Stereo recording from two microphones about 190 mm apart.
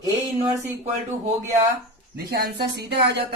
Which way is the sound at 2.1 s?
55° right (ahead or behind).